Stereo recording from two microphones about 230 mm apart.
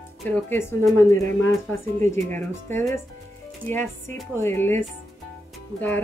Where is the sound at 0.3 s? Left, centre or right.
Centre.